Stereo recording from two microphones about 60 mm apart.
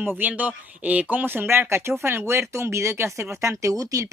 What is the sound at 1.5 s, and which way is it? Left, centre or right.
Speech, right.